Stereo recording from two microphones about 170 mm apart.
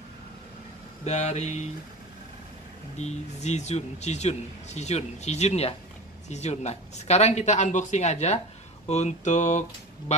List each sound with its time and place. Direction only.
1.0 s speech: 40° left (ahead or behind)
3.0 s speech: 40° left (ahead or behind)